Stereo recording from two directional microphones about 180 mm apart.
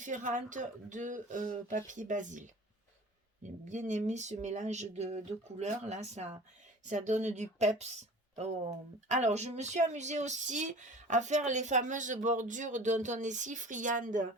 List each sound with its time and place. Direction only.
0.0 s speech: 45° right (ahead or behind)
3.4 s speech: 40° right (ahead or behind)
9.0 s speech: 40° right (ahead or behind)